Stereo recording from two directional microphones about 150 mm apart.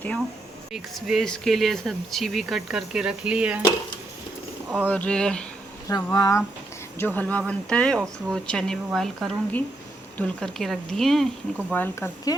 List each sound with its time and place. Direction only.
0.7 s speech: centre (ahead or behind)
4.9 s speech: 10° left (ahead or behind)
5.9 s speech: 20° left (ahead or behind); by 11.3 s centre (ahead or behind)
11.7 s speech: 15° left (ahead or behind)